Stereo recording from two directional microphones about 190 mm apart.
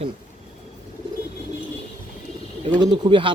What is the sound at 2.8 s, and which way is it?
Speech, 25° right (ahead or behind).